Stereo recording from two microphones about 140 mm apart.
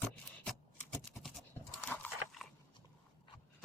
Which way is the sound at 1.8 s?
10° left (ahead or behind).